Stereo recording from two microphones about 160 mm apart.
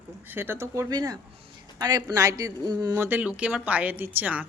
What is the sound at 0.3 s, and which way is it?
Speech, 15° right (ahead or behind).